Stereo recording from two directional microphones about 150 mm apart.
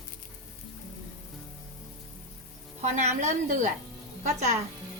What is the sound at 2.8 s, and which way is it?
A woman's voice, 50° right (ahead or behind).